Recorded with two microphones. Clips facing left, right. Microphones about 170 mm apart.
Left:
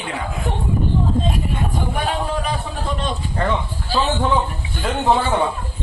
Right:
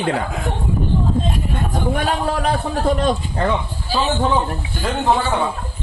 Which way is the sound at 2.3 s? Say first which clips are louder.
Right 4 dB; 65° right (ahead or behind).